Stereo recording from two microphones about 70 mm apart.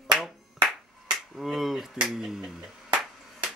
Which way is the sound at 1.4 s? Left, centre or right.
Centre.